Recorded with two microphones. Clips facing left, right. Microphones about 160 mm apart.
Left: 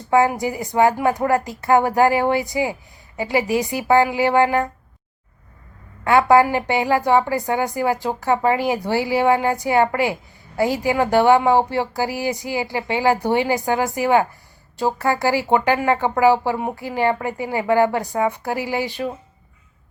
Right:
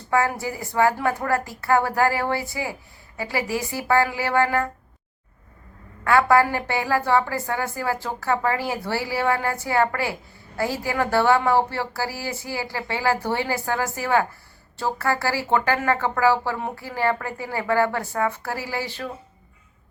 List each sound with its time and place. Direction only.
0.1 s speech: 20° left (ahead or behind)
6.1 s speech: 20° left (ahead or behind)